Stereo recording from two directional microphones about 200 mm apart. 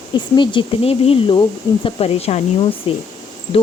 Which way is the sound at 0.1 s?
25° left (ahead or behind).